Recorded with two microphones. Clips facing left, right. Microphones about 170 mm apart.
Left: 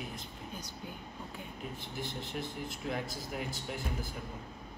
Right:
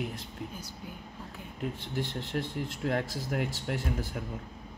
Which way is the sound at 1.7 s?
85° right.